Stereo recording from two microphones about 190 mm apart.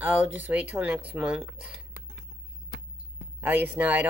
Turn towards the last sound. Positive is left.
turn(degrees=-10)  # may be behind; listen again after turning